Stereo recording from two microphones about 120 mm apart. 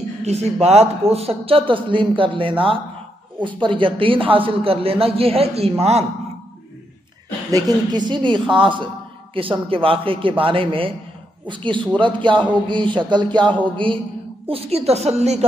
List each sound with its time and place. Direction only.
0.2 s a man's voice: 65° right (ahead or behind)
7.5 s a man's voice: 35° right (ahead or behind)
14.5 s speech: 60° right (ahead or behind)